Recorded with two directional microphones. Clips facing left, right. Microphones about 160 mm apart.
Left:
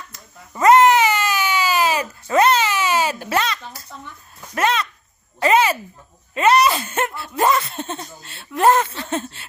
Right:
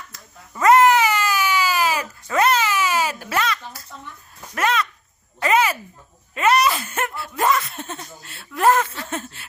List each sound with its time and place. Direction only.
0.1 s crying: 25° left (ahead or behind)
4.5 s speech: 25° left (ahead or behind)
5.4 s a sound: 25° left (ahead or behind)